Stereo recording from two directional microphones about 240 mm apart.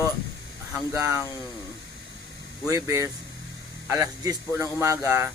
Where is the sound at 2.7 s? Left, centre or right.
Centre.